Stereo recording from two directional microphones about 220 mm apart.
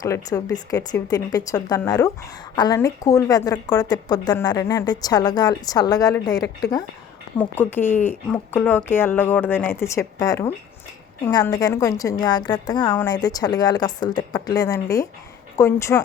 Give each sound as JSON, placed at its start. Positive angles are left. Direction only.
{"t": 0.0, "sound": "a woman's voice", "side_deg": 15}